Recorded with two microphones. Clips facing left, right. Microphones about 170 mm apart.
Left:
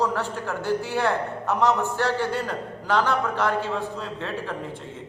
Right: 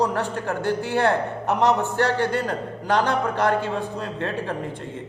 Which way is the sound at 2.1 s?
60° right (ahead or behind).